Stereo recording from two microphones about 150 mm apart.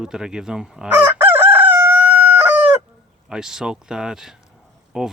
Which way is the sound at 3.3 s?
5° right (ahead or behind).